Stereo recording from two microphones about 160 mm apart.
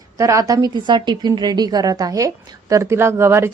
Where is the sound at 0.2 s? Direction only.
20° right (ahead or behind).